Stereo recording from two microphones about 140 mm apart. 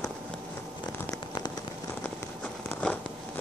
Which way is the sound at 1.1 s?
30° left (ahead or behind).